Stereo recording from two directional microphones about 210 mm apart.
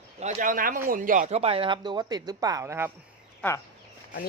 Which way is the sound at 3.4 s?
10° left (ahead or behind).